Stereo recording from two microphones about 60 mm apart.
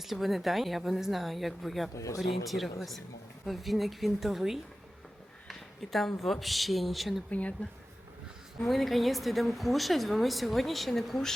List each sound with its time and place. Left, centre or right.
0.0 s a woman's voice: centre
7.3 s a woman's voice: left
8.6 s a woman's voice: centre